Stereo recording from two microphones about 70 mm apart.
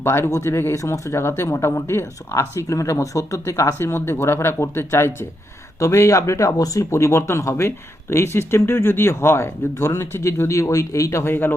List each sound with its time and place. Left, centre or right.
0.0 s speech: left
0.3 s speech: left